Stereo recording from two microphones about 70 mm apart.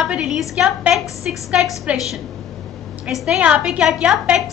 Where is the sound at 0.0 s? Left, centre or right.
Centre.